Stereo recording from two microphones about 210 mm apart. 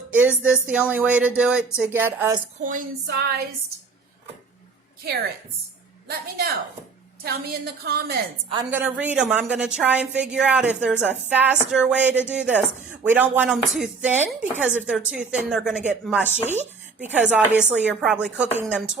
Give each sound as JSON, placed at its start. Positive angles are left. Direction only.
{"t": 0.1, "sound": "a woman's voice", "side_deg": -5}
{"t": 2.6, "sound": "a woman's voice", "side_deg": -40}
{"t": 6.1, "sound": "a woman's voice", "side_deg": -50}
{"t": 8.7, "sound": "a woman's voice", "side_deg": -10}